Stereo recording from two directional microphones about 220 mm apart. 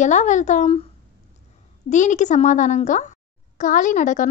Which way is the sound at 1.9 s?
35° left (ahead or behind).